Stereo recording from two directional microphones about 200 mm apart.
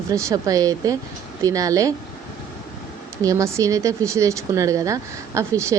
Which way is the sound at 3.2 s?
15° right (ahead or behind).